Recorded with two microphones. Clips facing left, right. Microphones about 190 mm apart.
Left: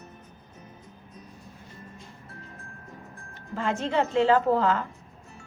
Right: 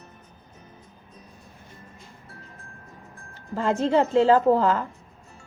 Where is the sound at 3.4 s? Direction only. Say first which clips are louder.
Right 5 dB; 35° right (ahead or behind).